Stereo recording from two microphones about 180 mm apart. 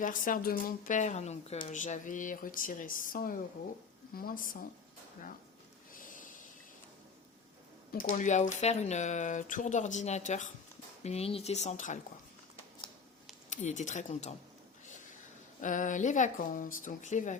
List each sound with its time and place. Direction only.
0.0 s speech: 45° left (ahead or behind)
5.9 s snort: 50° left (ahead or behind)
7.9 s speech: 45° left (ahead or behind)
13.5 s speech: 45° left (ahead or behind)
15.6 s speech: 45° left (ahead or behind)